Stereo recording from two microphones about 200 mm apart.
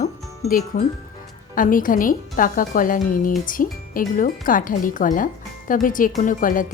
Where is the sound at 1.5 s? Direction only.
40° left (ahead or behind).